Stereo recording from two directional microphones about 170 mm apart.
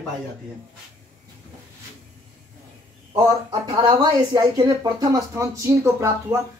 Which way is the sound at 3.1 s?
25° right (ahead or behind).